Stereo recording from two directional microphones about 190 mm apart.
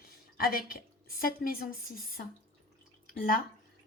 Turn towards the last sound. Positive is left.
turn(degrees=45)  # may be behind; listen again after turning